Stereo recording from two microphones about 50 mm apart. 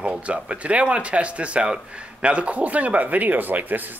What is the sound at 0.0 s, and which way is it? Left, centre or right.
Speech, right.